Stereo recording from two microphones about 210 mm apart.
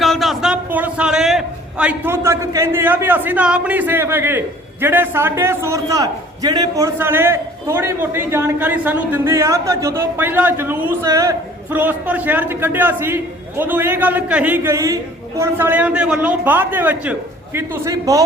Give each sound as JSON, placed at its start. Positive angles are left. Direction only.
{"t": 0.0, "sound": "a man's voice", "side_deg": 0}